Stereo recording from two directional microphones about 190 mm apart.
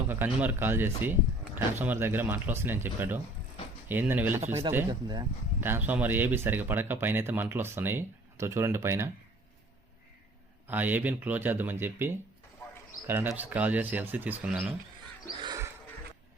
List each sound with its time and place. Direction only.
0.1 s speech: 10° right (ahead or behind)
5.5 s speech: 10° right (ahead or behind)
10.7 s speech: 10° right (ahead or behind)
12.6 s a sound: 15° left (ahead or behind)
13.1 s speech: 10° right (ahead or behind)
15.4 s a sound: 25° right (ahead or behind)